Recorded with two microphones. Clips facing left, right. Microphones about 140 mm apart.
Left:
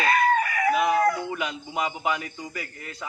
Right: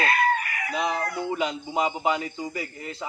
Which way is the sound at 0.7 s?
25° right (ahead or behind).